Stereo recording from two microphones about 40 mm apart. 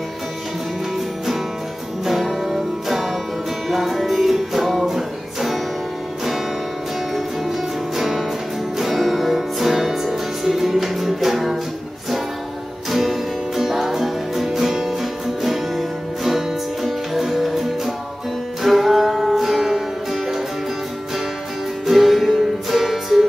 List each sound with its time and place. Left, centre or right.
0.9 s music: centre
7.2 s music: centre
12.9 s music: centre
21.8 s music: centre